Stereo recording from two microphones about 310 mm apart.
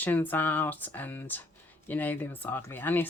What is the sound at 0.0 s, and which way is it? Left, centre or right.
Speech, centre.